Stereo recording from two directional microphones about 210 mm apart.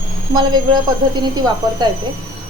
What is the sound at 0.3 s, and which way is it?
Speech, 20° right (ahead or behind).